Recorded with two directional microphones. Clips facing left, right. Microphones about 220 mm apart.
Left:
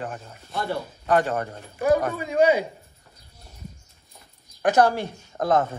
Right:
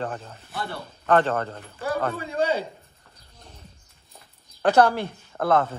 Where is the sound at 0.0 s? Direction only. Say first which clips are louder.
Right 2 dB; 10° left (ahead or behind).